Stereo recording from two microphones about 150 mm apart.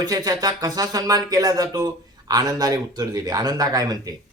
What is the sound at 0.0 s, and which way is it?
Speech, 25° right (ahead or behind).